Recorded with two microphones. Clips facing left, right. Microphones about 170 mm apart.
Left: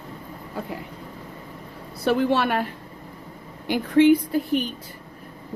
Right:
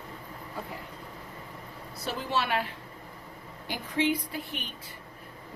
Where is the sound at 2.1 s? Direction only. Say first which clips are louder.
Left 10 dB; 60° left (ahead or behind).